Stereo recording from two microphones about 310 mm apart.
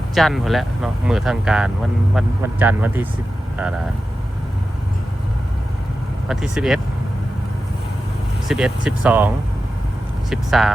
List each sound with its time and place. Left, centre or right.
0.1 s speech: centre
6.2 s speech: centre
8.4 s speech: centre